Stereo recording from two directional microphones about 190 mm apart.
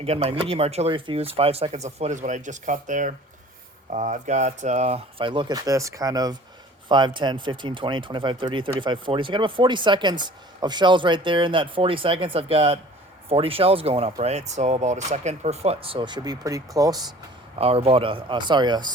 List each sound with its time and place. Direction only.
0.0 s speech: 30° right (ahead or behind)
17.6 s speech: 30° right (ahead or behind)